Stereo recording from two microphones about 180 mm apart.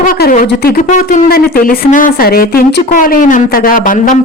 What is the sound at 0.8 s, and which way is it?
A woman's voice, 45° left (ahead or behind).